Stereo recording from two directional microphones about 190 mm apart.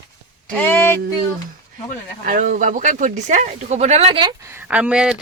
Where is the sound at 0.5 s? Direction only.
10° left (ahead or behind).